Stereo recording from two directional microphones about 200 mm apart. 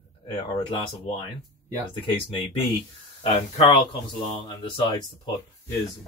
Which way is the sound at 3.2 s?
25° left (ahead or behind).